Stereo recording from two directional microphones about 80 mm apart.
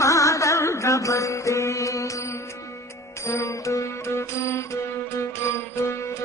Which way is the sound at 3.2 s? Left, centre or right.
Left.